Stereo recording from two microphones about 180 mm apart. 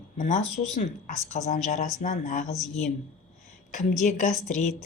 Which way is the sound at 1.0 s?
45° left (ahead or behind).